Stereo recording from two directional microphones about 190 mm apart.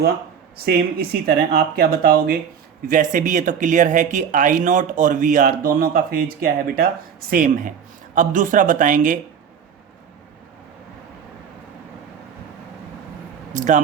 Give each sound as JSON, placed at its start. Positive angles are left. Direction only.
{"t": 0.5, "sound": "speech", "side_deg": -55}
{"t": 13.5, "sound": "speech", "side_deg": -40}